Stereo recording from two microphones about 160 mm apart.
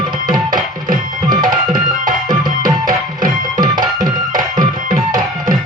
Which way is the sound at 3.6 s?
25° right (ahead or behind).